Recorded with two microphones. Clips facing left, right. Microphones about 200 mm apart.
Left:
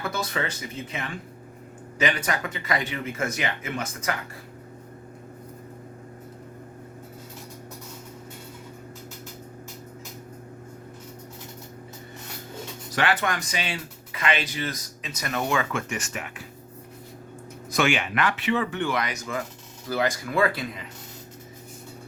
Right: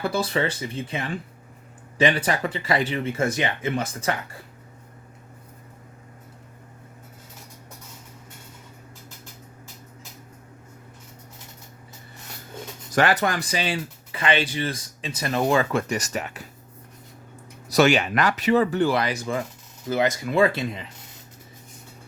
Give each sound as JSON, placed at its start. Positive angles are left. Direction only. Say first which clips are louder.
{"t": 0.0, "sound": "speech", "louder": "right 5 dB", "side_deg": -30}
{"t": 12.9, "sound": "speech", "louder": "right 4 dB", "side_deg": -40}
{"t": 17.7, "sound": "speech", "louder": "right 6 dB", "side_deg": -40}
{"t": 19.9, "sound": "speech", "louder": "right 3 dB", "side_deg": -20}